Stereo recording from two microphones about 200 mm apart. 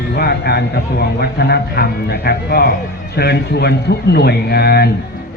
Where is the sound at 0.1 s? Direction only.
55° left (ahead or behind).